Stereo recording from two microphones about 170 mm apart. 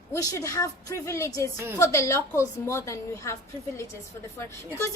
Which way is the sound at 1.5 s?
15° right (ahead or behind).